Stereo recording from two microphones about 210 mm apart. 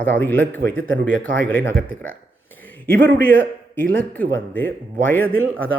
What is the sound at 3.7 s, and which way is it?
Speech, 10° left (ahead or behind).